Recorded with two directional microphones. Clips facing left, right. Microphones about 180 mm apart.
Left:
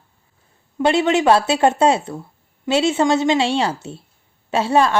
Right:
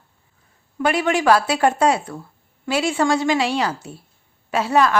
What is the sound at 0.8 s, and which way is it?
Speech, 25° left (ahead or behind).